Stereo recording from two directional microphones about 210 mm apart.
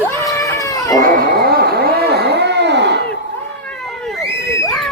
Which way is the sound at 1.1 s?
50° right (ahead or behind).